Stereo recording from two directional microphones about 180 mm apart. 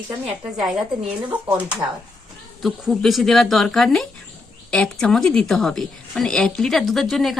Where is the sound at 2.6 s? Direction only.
Centre (ahead or behind).